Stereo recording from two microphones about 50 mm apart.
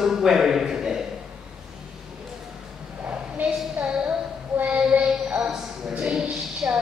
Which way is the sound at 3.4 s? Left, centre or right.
Right.